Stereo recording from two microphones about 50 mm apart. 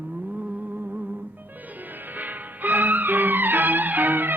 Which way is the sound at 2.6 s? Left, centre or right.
Right.